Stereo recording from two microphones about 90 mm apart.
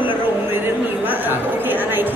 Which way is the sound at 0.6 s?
20° right (ahead or behind).